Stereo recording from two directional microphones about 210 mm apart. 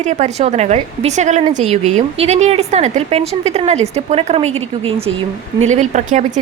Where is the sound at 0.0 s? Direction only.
35° right (ahead or behind).